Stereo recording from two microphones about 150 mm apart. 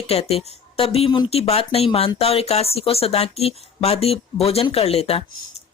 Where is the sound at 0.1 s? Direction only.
40° left (ahead or behind).